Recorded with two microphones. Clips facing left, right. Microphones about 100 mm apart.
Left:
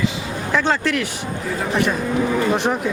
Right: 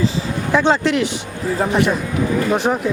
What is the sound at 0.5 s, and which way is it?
Speech, 20° right (ahead or behind).